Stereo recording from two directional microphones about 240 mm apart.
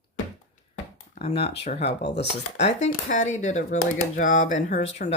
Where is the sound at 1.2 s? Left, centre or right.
Left.